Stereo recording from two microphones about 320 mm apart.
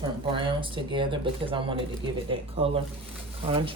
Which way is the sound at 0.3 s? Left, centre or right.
Centre.